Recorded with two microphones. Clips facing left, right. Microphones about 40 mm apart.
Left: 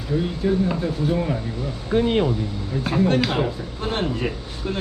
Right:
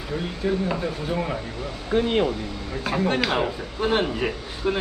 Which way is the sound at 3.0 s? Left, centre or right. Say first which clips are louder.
Left 2 dB; centre.